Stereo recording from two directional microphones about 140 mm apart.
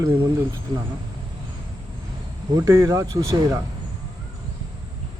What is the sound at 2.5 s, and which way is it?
Speech, 20° right (ahead or behind).